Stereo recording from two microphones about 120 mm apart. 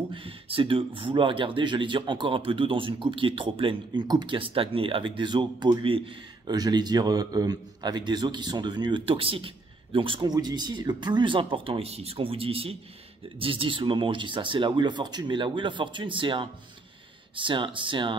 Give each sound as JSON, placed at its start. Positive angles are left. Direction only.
{"t": 0.1, "sound": "a man's voice", "side_deg": -50}